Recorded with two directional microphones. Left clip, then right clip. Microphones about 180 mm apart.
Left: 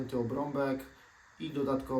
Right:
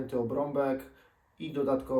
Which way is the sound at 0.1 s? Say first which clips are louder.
Right 4 dB; 10° left (ahead or behind).